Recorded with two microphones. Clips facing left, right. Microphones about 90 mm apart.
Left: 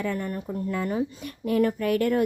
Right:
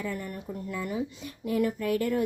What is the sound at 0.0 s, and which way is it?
Speech, 60° left (ahead or behind).